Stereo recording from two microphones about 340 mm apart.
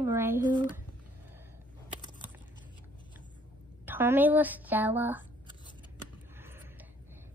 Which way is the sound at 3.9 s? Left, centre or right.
Centre.